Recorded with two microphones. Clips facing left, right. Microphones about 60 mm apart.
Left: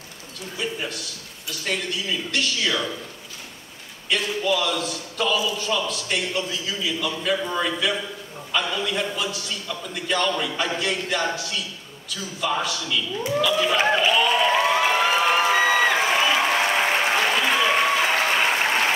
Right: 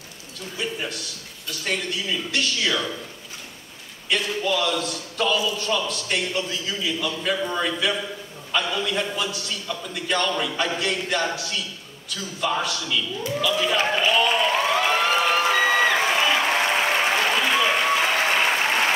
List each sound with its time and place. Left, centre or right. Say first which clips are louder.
0.6 s a man's voice: even; centre
4.1 s a man's voice: left 1 dB; centre
14.5 s a sound: left 1 dB; centre
17.5 s applause: left 1 dB; centre